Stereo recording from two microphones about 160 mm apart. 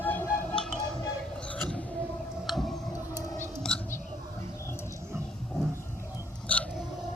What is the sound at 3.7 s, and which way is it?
Whispering, 5° left (ahead or behind).